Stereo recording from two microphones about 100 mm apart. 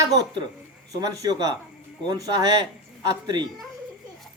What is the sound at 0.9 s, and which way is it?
Speech, 35° right (ahead or behind).